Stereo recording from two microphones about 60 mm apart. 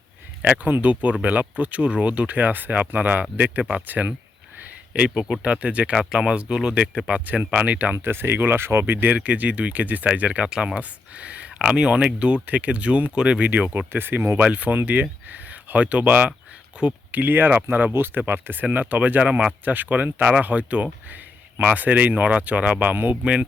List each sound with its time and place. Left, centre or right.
0.4 s speech: right
4.5 s a sound: right
5.0 s speech: centre
5.4 s speech: right
8.0 s speech: right
10.5 s speech: centre
10.8 s speech: right
13.4 s speech: right
13.9 s speech: right
14.3 s speech: right
19.6 s speech: right